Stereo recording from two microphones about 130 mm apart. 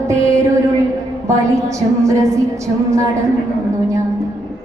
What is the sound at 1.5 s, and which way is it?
Speech, 25° right (ahead or behind).